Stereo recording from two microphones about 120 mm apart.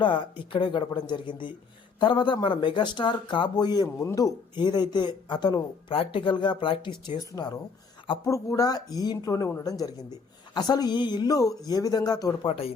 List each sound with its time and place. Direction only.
0.0 s speech: 40° left (ahead or behind)
5.9 s speech: 50° left (ahead or behind)
7.3 s speech: 20° left (ahead or behind)
12.5 s speech: 55° left (ahead or behind)